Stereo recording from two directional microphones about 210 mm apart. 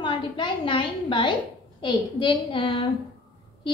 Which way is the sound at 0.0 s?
25° left (ahead or behind).